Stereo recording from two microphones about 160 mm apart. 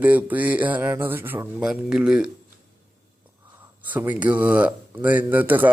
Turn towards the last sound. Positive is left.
turn(degrees=-10)  # may be behind; listen again after turning